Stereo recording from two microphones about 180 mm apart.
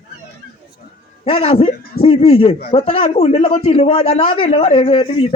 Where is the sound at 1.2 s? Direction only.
30° left (ahead or behind).